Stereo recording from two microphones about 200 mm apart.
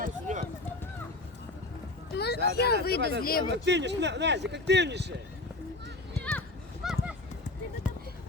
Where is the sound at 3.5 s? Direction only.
60° right (ahead or behind).